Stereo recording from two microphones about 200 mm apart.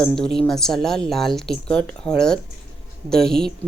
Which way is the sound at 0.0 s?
5° left (ahead or behind).